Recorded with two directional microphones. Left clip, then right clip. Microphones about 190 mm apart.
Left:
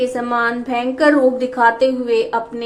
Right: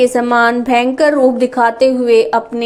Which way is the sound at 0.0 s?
35° right (ahead or behind).